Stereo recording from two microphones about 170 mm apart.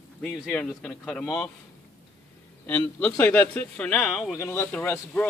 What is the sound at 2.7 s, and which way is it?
A man's voice, 10° left (ahead or behind).